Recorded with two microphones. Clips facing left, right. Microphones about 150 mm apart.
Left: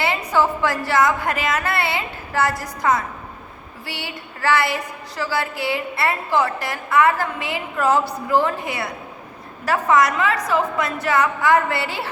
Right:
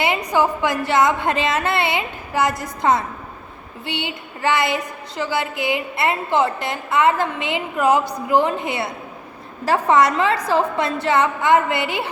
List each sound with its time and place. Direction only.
0.0 s a woman's voice: 15° right (ahead or behind)